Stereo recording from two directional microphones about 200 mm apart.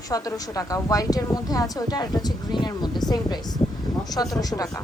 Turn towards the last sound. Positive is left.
turn(degrees=20)  # may be behind; listen again after turning